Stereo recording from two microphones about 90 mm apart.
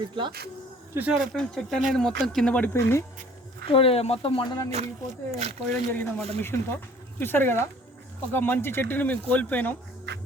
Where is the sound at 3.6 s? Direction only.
90° left.